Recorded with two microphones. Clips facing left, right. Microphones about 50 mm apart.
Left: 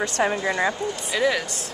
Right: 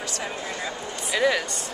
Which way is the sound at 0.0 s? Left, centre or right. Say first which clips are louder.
Left 9 dB; left.